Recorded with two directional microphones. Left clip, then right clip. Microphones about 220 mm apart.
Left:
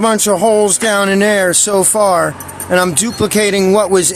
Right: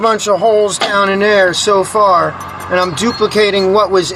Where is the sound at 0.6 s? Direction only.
75° left (ahead or behind).